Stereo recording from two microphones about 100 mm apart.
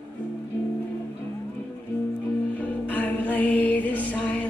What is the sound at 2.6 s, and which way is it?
Music, 15° left (ahead or behind).